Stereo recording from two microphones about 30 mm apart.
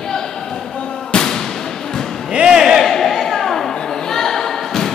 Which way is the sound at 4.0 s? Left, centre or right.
Centre.